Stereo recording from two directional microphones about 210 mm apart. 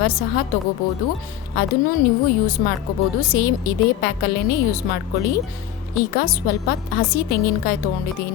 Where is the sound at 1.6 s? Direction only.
45° left (ahead or behind).